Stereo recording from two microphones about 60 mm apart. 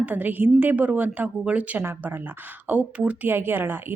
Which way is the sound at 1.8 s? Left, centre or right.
Right.